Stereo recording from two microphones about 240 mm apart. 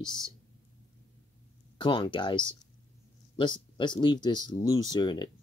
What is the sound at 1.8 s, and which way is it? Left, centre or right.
Speech, centre.